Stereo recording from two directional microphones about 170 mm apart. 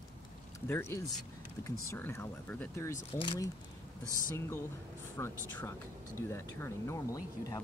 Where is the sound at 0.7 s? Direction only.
15° left (ahead or behind).